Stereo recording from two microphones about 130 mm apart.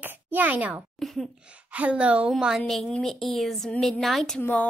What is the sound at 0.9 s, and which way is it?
Speech, centre (ahead or behind).